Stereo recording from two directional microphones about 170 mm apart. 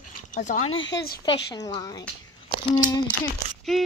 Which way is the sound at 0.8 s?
90° left.